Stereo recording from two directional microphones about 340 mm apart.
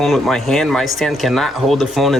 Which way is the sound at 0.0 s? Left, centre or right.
Centre.